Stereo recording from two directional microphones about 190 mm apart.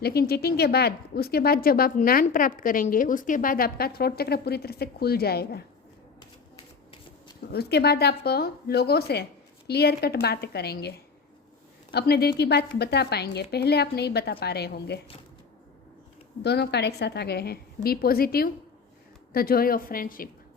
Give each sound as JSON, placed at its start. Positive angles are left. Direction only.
{"t": 0.0, "sound": "speech", "side_deg": 55}
{"t": 6.1, "sound": "typewriter", "side_deg": 25}
{"t": 7.5, "sound": "a woman's voice", "side_deg": 55}
{"t": 16.4, "sound": "a woman's voice", "side_deg": 60}